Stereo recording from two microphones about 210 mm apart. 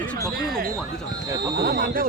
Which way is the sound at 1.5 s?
45° right (ahead or behind).